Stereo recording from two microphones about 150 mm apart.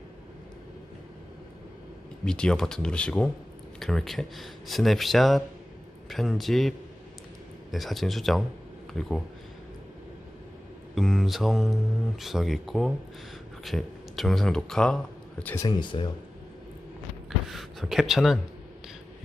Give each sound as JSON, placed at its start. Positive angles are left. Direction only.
{"t": 2.2, "sound": "speech", "side_deg": 5}
{"t": 10.9, "sound": "speech", "side_deg": 0}
{"t": 15.6, "sound": "speech", "side_deg": 30}
{"t": 17.2, "sound": "a sound", "side_deg": 0}